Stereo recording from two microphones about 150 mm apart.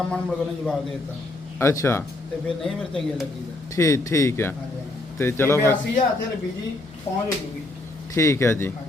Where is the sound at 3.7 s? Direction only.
20° left (ahead or behind).